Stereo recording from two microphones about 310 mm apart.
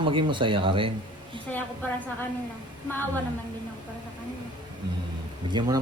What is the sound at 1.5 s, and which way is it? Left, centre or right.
Speech, centre.